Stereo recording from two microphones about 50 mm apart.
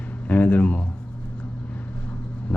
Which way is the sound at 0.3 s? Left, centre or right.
Left.